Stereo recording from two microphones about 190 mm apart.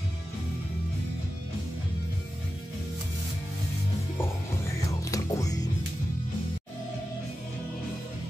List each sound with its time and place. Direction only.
5.1 s music: 20° left (ahead or behind)